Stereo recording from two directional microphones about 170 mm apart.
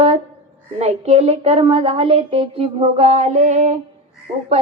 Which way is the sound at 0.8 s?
40° right (ahead or behind).